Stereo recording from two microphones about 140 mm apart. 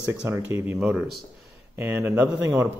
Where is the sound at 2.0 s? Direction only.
15° right (ahead or behind).